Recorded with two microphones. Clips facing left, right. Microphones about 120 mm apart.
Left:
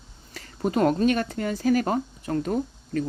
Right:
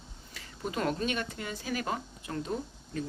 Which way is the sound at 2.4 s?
65° left (ahead or behind).